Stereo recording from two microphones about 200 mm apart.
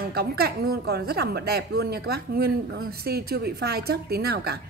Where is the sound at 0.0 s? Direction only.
50° right (ahead or behind).